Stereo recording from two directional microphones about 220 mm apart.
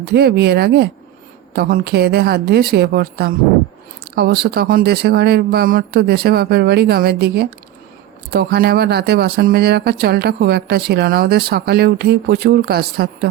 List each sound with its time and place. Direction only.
0.0 s speech: 45° right (ahead or behind)